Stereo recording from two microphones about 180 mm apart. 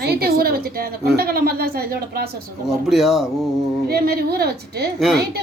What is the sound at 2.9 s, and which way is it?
Speech, centre (ahead or behind).